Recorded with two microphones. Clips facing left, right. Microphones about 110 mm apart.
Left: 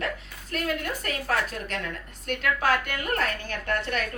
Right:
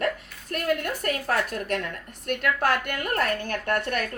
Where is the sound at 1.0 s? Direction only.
55° right (ahead or behind).